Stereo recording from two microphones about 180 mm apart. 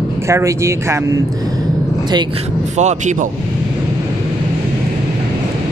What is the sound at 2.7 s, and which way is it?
Speech, 40° right (ahead or behind).